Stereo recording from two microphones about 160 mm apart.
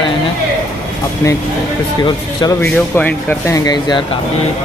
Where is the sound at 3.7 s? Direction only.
25° left (ahead or behind).